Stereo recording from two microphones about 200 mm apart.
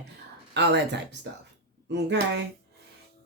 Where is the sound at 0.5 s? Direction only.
60° right (ahead or behind).